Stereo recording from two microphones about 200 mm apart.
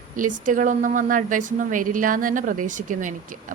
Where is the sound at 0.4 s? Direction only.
40° right (ahead or behind).